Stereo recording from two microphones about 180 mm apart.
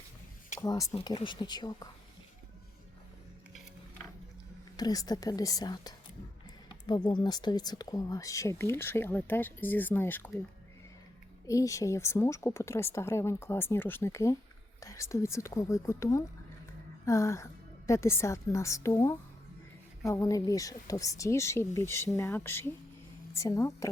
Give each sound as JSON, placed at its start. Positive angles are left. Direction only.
{"t": 0.6, "sound": "a woman's voice", "side_deg": 20}
{"t": 4.8, "sound": "a woman's voice", "side_deg": 20}
{"t": 11.4, "sound": "speech", "side_deg": 15}